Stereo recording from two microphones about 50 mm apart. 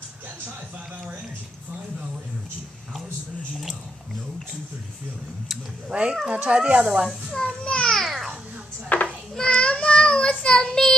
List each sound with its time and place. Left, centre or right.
5.9 s speech: right
7.3 s a child's voice: centre
7.9 s babbling: centre
8.8 s a child's voice: left
9.3 s child singing: centre